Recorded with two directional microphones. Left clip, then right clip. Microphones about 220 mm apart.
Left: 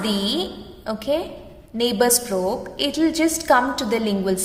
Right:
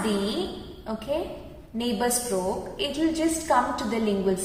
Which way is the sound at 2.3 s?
55° left (ahead or behind).